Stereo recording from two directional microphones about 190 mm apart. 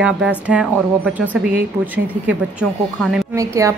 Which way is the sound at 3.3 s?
15° right (ahead or behind).